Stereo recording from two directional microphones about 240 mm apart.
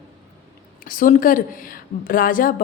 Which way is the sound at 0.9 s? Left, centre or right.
Left.